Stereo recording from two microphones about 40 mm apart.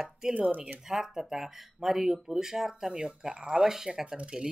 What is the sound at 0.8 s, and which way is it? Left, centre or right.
Speech, centre.